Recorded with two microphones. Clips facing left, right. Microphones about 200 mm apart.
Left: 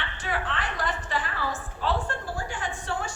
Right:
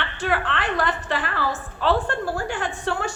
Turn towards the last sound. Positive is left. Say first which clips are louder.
# right 6 dB
turn(degrees=-70)  # may be behind; listen again after turning